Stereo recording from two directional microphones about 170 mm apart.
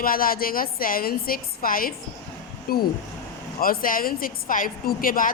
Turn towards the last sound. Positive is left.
turn(degrees=55)  # may be behind; listen again after turning